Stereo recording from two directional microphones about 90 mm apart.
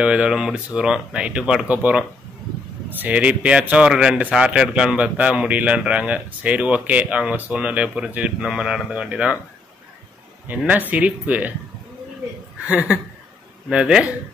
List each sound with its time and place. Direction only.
0.0 s speech: 10° right (ahead or behind)
10.7 s speech: 15° right (ahead or behind)
12.6 s speech: 15° right (ahead or behind)